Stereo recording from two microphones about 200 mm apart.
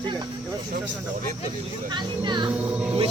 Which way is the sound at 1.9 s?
20° right (ahead or behind).